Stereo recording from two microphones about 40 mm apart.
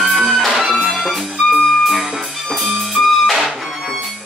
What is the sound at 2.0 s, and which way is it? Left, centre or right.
Music, centre.